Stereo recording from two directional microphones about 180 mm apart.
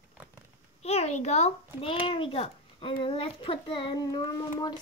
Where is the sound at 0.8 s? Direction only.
35° left (ahead or behind).